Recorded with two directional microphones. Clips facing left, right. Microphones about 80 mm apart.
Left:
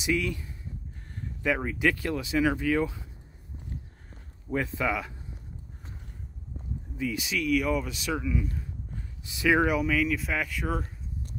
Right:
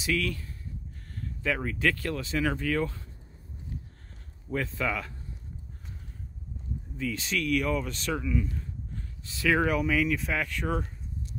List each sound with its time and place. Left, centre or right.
0.0 s speech: centre
4.1 s speech: centre
7.0 s speech: centre
9.8 s speech: centre